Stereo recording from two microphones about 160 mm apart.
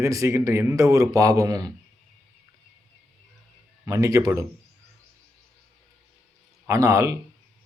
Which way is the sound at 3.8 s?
20° right (ahead or behind).